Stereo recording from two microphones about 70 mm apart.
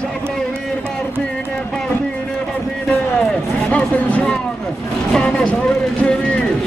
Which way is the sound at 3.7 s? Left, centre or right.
Centre.